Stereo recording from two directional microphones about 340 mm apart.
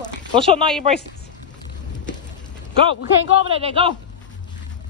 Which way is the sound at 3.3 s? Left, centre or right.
Centre.